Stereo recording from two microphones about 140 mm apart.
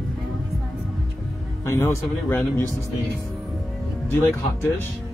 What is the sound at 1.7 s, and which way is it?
Speech, 20° left (ahead or behind).